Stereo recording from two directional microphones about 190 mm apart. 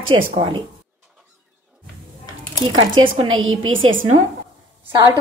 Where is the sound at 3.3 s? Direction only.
90° right.